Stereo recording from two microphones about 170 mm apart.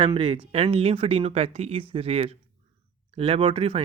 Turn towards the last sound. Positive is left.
turn(degrees=-35)  # may be behind; listen again after turning